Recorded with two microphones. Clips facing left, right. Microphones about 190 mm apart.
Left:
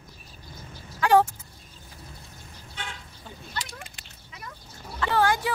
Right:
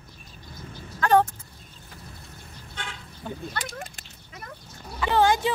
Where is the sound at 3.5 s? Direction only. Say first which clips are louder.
Right 3 dB; 45° right (ahead or behind).